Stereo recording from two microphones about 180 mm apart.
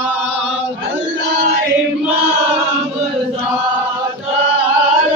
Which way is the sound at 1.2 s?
60° right (ahead or behind).